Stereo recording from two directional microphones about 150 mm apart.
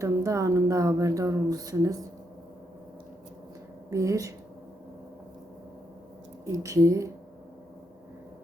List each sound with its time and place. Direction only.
0.0 s speech: 20° right (ahead or behind)
3.8 s speech: 20° right (ahead or behind)
6.4 s speech: 20° right (ahead or behind)